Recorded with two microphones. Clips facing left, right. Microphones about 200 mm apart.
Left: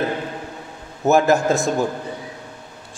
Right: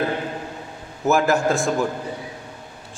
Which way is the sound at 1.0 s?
20° left (ahead or behind).